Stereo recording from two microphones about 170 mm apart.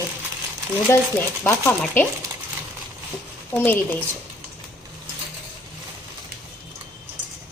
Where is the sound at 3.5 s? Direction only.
10° left (ahead or behind).